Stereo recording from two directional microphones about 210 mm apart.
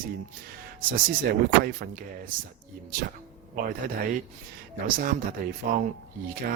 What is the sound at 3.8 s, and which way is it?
Speech, 40° right (ahead or behind).